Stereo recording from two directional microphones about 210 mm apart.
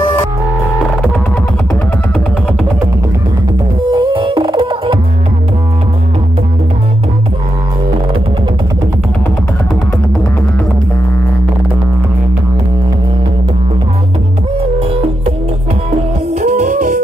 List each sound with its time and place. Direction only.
3.9 s music: 25° right (ahead or behind)
16.3 s music: 35° right (ahead or behind)